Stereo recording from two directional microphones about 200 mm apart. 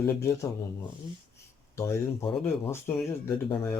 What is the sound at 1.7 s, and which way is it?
Speech, 15° left (ahead or behind).